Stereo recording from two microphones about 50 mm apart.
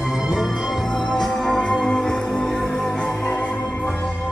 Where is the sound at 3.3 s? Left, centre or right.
Left.